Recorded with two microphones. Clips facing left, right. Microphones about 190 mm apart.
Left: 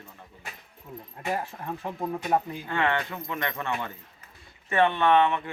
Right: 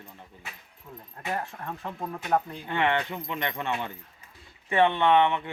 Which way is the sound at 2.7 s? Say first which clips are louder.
Right 2 dB; 20° right (ahead or behind).